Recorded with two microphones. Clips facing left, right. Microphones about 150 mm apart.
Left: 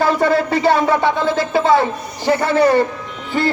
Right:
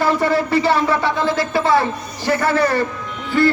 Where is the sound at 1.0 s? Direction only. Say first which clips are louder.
Left 2 dB; 55° left (ahead or behind).